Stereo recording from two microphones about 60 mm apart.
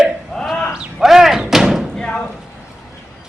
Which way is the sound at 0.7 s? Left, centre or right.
Centre.